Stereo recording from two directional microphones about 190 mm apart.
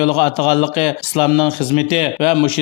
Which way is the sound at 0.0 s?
30° left (ahead or behind).